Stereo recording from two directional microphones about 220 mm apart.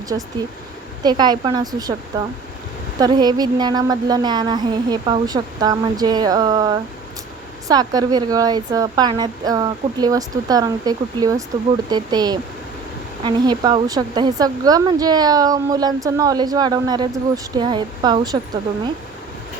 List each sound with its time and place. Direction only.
1.0 s a woman's voice: 20° right (ahead or behind)